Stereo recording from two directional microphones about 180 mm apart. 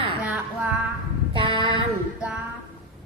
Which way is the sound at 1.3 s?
30° right (ahead or behind).